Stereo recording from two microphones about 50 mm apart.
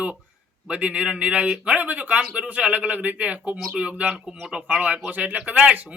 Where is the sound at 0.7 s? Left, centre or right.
Right.